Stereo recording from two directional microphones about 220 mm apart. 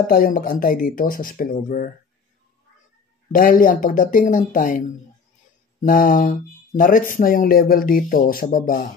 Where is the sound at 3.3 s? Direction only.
40° left (ahead or behind).